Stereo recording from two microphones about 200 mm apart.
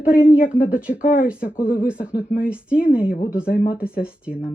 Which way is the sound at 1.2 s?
5° right (ahead or behind).